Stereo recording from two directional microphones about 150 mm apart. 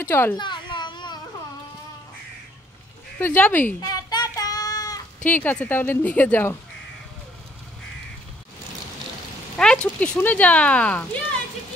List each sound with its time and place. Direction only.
0.0 s speech: 15° left (ahead or behind)
0.4 s a sound: 30° left (ahead or behind)
3.2 s speech: 10° left (ahead or behind)
3.8 s child singing: 25° left (ahead or behind)
5.2 s speech: 10° left (ahead or behind)
9.6 s speech: 5° left (ahead or behind)